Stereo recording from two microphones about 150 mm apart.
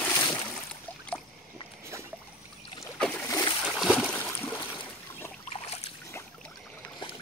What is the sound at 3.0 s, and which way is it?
Boat, 10° left (ahead or behind).